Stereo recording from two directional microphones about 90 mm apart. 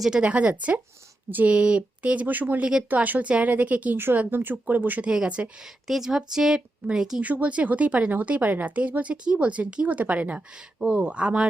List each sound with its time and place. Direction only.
0.0 s a woman's voice: 10° right (ahead or behind)